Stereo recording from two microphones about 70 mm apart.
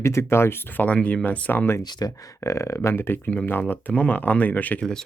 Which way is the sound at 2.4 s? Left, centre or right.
Left.